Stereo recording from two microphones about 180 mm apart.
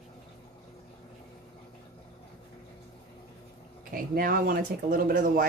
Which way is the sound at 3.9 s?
55° right (ahead or behind).